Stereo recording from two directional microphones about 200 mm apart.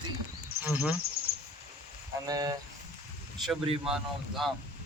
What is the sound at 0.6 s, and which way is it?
Speech, 10° right (ahead or behind).